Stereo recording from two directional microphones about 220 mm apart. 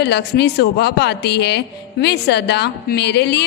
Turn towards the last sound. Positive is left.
turn(degrees=50)  # may be behind; listen again after turning